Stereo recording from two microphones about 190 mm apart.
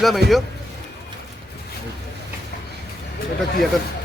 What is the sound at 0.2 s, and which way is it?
Speech, 60° right (ahead or behind).